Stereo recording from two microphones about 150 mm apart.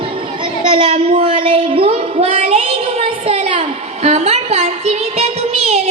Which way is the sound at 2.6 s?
40° right (ahead or behind).